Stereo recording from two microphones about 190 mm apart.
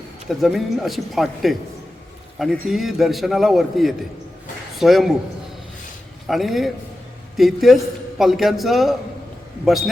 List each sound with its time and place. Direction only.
0.3 s a man's voice: centre (ahead or behind)
6.2 s a man's voice: centre (ahead or behind)